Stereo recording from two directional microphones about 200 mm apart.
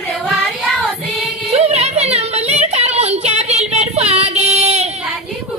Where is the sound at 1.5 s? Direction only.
30° right (ahead or behind).